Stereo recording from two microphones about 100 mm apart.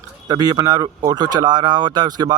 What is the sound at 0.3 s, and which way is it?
Speech, 40° right (ahead or behind).